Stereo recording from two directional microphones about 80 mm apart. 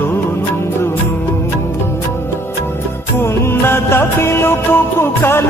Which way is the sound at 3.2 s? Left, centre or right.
Left.